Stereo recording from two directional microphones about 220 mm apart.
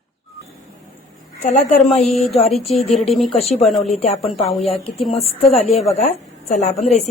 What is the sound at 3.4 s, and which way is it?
Speech, 30° left (ahead or behind).